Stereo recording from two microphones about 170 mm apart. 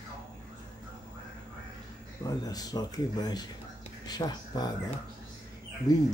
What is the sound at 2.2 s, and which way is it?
Speech, 20° left (ahead or behind).